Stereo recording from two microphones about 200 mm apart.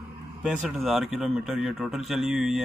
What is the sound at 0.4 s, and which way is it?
A man's voice, 5° right (ahead or behind).